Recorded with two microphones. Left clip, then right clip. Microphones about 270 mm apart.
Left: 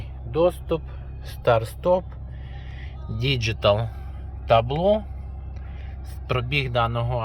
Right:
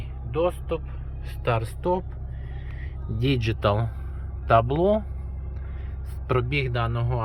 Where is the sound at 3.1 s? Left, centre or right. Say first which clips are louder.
Left 1 dB; centre.